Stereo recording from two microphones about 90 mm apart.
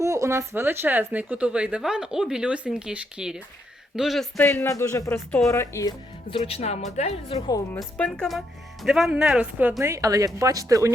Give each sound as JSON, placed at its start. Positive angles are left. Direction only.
{"t": 0.0, "sound": "speech", "side_deg": -35}
{"t": 4.4, "sound": "speech", "side_deg": 25}
{"t": 6.3, "sound": "speech", "side_deg": 90}
{"t": 7.3, "sound": "a woman's voice", "side_deg": 45}
{"t": 7.9, "sound": "speech", "side_deg": 10}
{"t": 9.8, "sound": "speech", "side_deg": -35}